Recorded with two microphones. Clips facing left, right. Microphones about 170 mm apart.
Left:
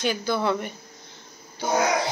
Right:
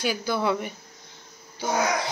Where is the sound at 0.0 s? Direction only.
10° right (ahead or behind).